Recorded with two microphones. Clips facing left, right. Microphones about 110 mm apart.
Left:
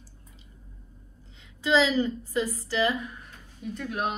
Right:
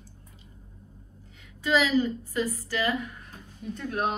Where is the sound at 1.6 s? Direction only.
20° left (ahead or behind).